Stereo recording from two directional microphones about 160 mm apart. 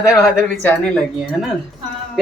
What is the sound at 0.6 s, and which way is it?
Speech, 10° left (ahead or behind).